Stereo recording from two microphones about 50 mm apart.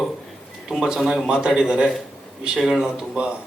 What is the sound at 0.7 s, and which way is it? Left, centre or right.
Speech, centre.